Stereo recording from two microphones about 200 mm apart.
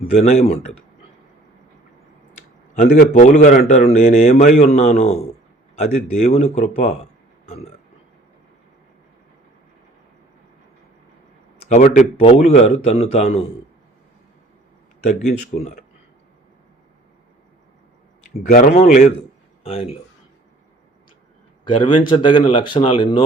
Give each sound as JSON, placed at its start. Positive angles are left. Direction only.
{"t": 0.1, "sound": "a man's voice", "side_deg": 30}
{"t": 2.7, "sound": "a man's voice", "side_deg": 35}
{"t": 11.7, "sound": "a man's voice", "side_deg": 35}
{"t": 15.3, "sound": "a man's voice", "side_deg": 35}
{"t": 18.3, "sound": "a man's voice", "side_deg": 40}
{"t": 21.6, "sound": "speech", "side_deg": 25}